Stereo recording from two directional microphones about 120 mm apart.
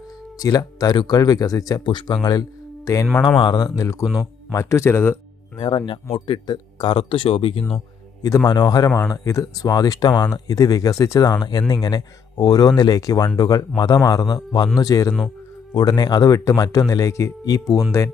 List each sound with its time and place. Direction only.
0.3 s a man's voice: 30° left (ahead or behind)
3.3 s a man's voice: 35° left (ahead or behind)
4.0 s speech: centre (ahead or behind)
4.5 s speech: 25° left (ahead or behind)
5.5 s speech: 45° left (ahead or behind)
8.4 s a man's voice: 35° left (ahead or behind)